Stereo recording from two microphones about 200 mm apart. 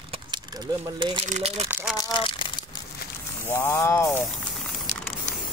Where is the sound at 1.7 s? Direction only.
10° right (ahead or behind).